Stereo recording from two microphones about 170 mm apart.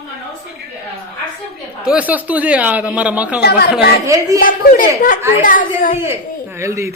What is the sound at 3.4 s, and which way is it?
Speech, 70° left (ahead or behind).